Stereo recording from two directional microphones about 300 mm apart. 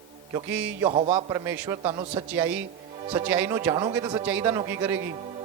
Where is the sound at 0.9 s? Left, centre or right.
Centre.